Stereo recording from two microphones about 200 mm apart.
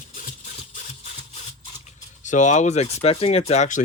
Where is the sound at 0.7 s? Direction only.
35° left (ahead or behind).